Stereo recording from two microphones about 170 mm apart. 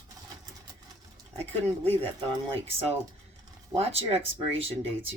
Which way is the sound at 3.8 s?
35° right (ahead or behind).